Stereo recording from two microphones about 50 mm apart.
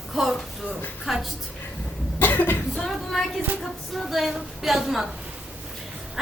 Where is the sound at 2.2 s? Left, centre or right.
Left.